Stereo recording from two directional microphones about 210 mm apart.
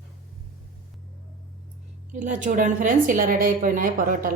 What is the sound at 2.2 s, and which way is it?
A woman's voice, 35° right (ahead or behind).